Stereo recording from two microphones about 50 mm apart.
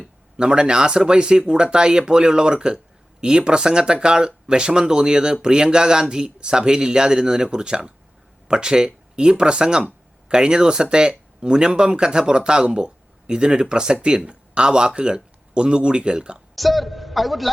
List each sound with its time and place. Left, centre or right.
0.3 s speech: centre
16.6 s a man's voice: centre